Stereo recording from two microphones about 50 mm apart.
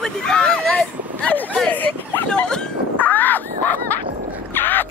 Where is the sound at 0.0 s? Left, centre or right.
Centre.